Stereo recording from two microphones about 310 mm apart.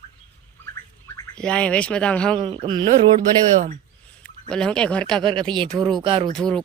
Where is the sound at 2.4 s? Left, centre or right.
Centre.